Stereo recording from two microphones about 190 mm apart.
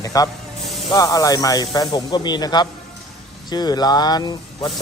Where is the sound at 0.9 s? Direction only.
20° left (ahead or behind).